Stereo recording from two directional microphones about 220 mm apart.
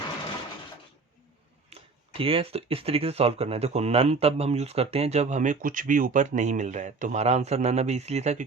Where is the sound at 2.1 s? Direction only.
25° right (ahead or behind).